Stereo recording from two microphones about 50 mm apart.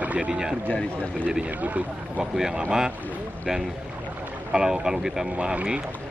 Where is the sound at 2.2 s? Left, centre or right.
Centre.